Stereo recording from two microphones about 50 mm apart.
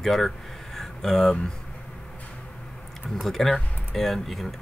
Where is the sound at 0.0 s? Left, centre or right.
Centre.